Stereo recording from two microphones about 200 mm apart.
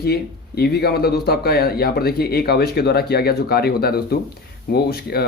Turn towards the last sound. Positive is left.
turn(degrees=50)  # may be behind; listen again after turning